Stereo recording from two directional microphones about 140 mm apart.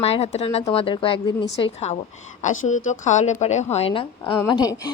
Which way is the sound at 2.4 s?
60° left (ahead or behind).